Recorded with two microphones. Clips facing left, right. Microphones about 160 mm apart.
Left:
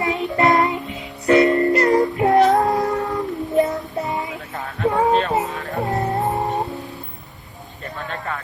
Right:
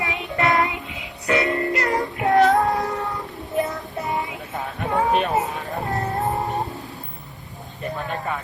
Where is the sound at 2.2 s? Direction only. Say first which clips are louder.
Even; 20° left (ahead or behind).